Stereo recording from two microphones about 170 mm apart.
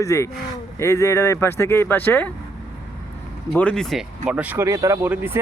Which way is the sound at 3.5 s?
5° left (ahead or behind).